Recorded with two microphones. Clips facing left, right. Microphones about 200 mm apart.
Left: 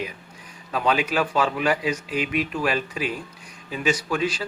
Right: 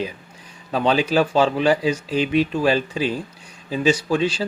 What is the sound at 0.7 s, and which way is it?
Speech, 30° right (ahead or behind).